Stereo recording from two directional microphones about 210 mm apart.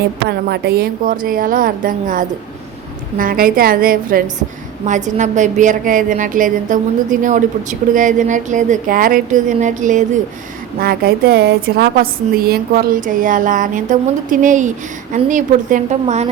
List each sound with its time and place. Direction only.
0.3 s a woman's voice: 50° right (ahead or behind); by 16.3 s 30° right (ahead or behind)